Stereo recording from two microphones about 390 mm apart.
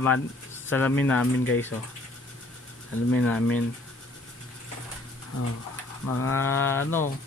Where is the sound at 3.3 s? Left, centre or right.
Centre.